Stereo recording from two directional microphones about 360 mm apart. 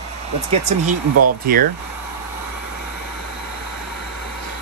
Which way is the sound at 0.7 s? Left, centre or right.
Centre.